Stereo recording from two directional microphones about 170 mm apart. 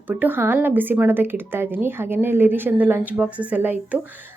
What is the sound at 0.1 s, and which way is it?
Speech, 10° right (ahead or behind).